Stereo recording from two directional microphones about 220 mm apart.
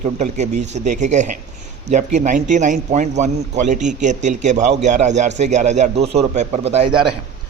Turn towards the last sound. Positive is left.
turn(degrees=-30)  # may be behind; listen again after turning